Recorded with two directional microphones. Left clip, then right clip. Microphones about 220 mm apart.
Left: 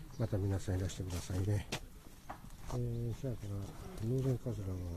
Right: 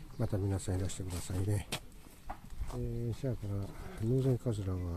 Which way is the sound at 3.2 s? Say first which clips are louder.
Right 5 dB; 45° right (ahead or behind).